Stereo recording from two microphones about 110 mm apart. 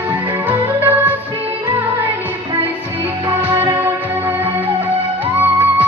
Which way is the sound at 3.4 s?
20° right (ahead or behind).